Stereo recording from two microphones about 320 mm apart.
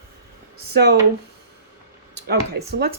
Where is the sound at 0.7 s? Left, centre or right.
Right.